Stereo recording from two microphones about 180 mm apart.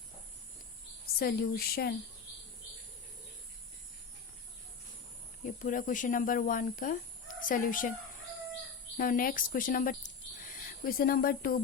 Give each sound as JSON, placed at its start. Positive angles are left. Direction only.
{"t": 1.0, "sound": "speech", "side_deg": 55}
{"t": 5.4, "sound": "speech", "side_deg": 45}
{"t": 9.0, "sound": "speech", "side_deg": 50}